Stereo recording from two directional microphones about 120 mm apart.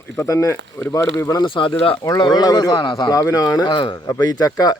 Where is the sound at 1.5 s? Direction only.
45° left (ahead or behind).